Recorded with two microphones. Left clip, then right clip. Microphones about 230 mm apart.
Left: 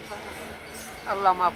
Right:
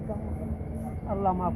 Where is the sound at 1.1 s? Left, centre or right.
Left.